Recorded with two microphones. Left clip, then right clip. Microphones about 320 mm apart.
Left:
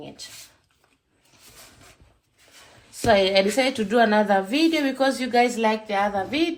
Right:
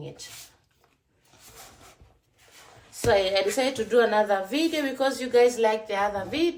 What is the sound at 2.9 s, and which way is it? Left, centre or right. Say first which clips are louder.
Speech: left 4 dB; centre.